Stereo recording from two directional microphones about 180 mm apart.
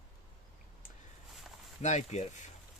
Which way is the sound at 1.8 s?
40° left (ahead or behind).